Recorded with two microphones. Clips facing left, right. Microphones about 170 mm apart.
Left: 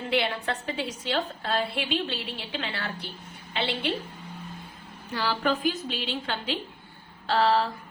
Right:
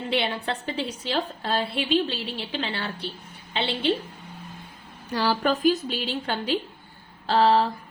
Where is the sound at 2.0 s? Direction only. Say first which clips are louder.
Right 3 dB; 35° right (ahead or behind).